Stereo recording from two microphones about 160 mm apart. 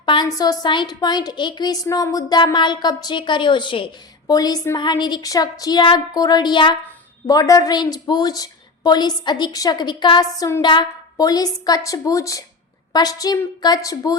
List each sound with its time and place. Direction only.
0.0 s a woman's voice: 30° left (ahead or behind)